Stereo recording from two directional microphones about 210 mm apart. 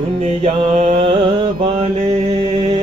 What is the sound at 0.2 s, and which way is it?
Mantra, 30° right (ahead or behind).